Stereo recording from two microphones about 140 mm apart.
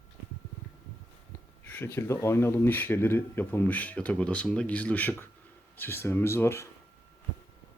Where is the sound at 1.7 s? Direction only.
15° left (ahead or behind).